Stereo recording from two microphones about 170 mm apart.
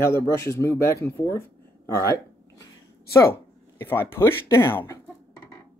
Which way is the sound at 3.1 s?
15° left (ahead or behind).